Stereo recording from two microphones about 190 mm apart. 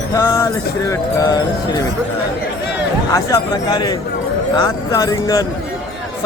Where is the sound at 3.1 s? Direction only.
20° left (ahead or behind).